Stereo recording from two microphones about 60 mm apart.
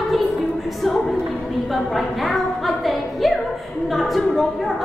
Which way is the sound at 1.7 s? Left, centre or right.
Centre.